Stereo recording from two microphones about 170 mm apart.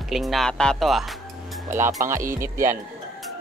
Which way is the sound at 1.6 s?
15° right (ahead or behind).